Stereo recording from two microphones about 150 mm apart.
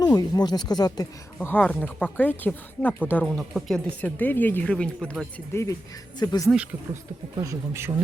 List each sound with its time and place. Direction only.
0.0 s speech: 25° left (ahead or behind)
1.4 s speech: 10° left (ahead or behind)
3.2 s speech: centre (ahead or behind)
5.5 s speech: 15° left (ahead or behind)
7.4 s speech: 15° right (ahead or behind)